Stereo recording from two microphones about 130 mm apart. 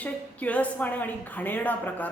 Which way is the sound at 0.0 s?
10° left (ahead or behind).